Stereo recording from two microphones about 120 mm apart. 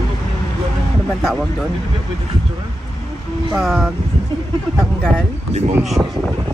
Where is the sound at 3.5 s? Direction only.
Centre (ahead or behind).